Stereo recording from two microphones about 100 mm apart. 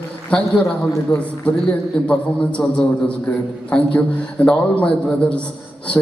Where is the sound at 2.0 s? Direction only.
15° left (ahead or behind).